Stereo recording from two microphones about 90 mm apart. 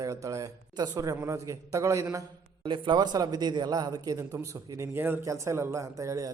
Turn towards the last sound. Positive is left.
turn(degrees=-40)  # may be behind; listen again after turning